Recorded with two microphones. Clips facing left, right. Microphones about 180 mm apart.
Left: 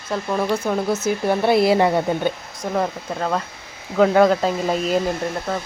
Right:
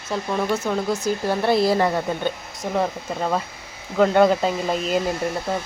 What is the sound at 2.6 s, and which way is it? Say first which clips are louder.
Speech: even; centre (ahead or behind).